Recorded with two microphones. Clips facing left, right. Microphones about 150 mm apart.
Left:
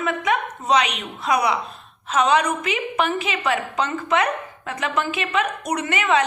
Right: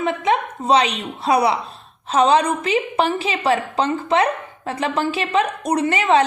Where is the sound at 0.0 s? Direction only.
30° right (ahead or behind).